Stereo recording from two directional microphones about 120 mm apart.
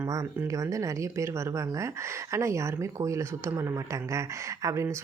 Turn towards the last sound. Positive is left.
turn(degrees=-25)  # may be behind; listen again after turning